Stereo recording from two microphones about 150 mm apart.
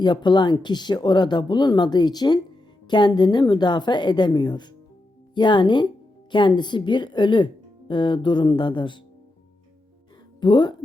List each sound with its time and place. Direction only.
0.0 s speech: 30° left (ahead or behind)
10.4 s speech: 30° left (ahead or behind)